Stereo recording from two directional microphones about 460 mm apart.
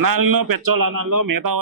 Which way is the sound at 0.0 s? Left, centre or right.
Right.